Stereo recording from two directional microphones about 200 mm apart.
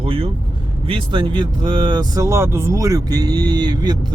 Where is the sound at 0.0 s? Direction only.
30° right (ahead or behind).